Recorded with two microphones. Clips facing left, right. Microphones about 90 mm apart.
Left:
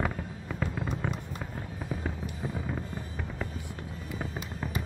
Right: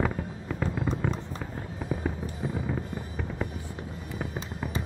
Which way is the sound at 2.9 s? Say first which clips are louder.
Right 3 dB; 15° right (ahead or behind).